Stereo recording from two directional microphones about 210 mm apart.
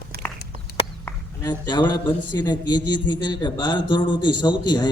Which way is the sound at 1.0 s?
15° left (ahead or behind).